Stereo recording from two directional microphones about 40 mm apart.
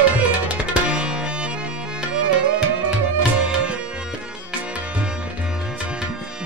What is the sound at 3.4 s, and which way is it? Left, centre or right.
Tabla, right.